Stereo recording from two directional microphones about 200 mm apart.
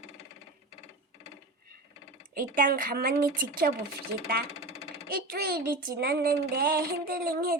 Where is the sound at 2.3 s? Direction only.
45° right (ahead or behind).